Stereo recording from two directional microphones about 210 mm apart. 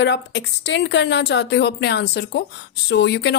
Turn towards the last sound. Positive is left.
turn(degrees=55)  # may be behind; listen again after turning